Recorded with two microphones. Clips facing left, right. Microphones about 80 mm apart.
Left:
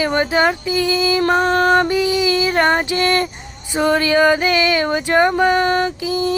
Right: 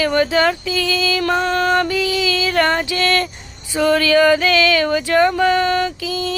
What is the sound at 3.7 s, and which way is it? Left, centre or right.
Female singing, left.